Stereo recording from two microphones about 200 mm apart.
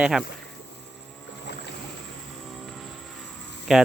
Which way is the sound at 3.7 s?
5° right (ahead or behind).